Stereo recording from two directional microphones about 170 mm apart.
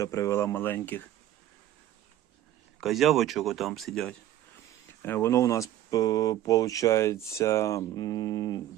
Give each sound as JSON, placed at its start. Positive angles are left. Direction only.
{"t": 0.0, "sound": "speech", "side_deg": 20}
{"t": 2.8, "sound": "speech", "side_deg": 0}
{"t": 5.0, "sound": "speech", "side_deg": 15}